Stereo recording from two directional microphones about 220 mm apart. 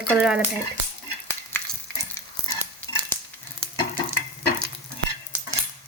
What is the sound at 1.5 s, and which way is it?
Stir, 10° left (ahead or behind).